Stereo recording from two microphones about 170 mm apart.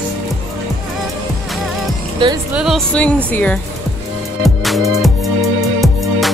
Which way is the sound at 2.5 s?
5° right (ahead or behind).